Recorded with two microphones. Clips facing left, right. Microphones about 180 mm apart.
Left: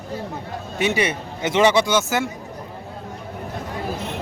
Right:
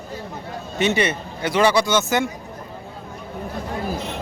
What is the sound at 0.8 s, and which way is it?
A man's voice, 10° left (ahead or behind).